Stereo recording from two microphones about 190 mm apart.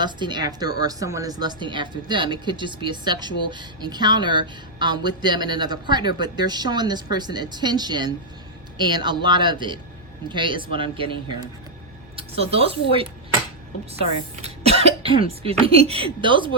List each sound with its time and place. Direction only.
0.0 s speech: 25° right (ahead or behind)
14.4 s speech: 35° right (ahead or behind)